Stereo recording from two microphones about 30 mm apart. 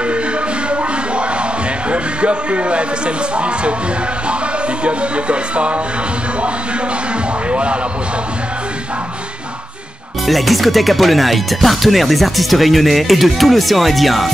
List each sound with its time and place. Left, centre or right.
1.9 s speech: right
4.8 s speech: right
7.4 s speech: right
10.2 s speech: centre